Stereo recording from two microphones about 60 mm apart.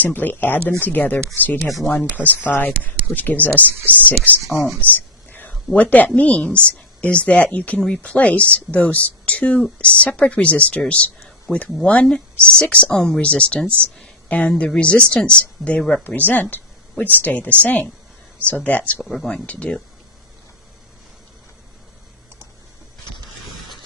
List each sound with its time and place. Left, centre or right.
0.0 s speech: left
1.6 s speech: centre
2.1 s speech: left
3.7 s speech: right
3.9 s speech: left
4.9 s a sound: left
6.1 s a woman's voice: left
15.8 s speech: centre
16.0 s speech: left
19.0 s speech: centre
19.5 s speech: centre